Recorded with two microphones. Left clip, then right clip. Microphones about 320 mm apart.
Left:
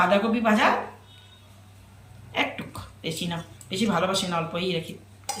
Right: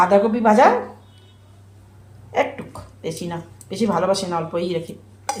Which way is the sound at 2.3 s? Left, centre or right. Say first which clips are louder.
Right 6 dB; centre.